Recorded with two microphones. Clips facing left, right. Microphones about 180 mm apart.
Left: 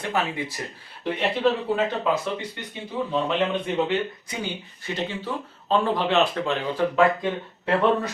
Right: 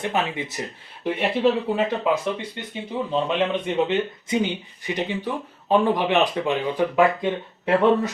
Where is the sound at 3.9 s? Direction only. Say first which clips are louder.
Right 3 dB; 20° right (ahead or behind).